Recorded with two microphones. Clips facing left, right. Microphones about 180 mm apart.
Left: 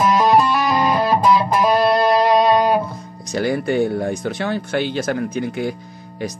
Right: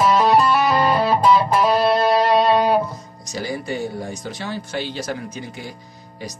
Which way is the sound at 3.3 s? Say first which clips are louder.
Left 7 dB; 60° left (ahead or behind).